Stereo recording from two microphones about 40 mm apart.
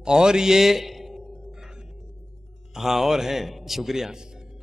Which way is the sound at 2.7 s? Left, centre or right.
Centre.